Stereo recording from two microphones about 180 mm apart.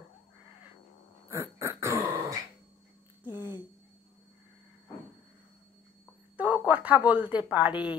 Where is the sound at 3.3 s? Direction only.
25° left (ahead or behind).